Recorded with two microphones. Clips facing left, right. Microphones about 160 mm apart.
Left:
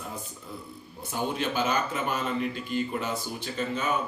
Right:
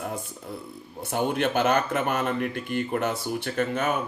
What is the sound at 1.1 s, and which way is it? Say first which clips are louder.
Speech: right 5 dB; 60° right (ahead or behind).